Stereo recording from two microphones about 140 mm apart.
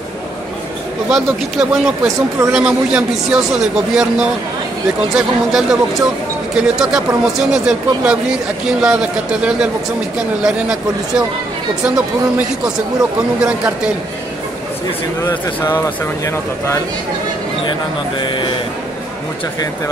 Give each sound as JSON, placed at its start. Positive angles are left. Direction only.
{"t": 1.1, "sound": "speech", "side_deg": -5}
{"t": 13.4, "sound": "speech", "side_deg": -10}
{"t": 15.2, "sound": "speech", "side_deg": 15}
{"t": 18.2, "sound": "speech", "side_deg": 35}